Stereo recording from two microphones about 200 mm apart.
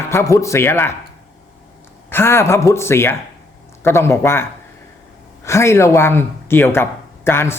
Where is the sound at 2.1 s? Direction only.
10° left (ahead or behind).